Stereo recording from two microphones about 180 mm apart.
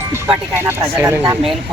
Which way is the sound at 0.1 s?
10° right (ahead or behind).